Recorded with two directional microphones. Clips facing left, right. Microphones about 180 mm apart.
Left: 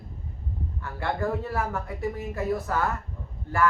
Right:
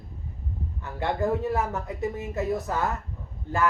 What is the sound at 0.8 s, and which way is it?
Speech, 20° right (ahead or behind).